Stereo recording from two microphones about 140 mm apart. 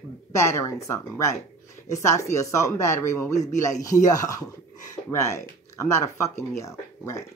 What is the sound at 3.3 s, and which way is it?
Speech, 55° left (ahead or behind).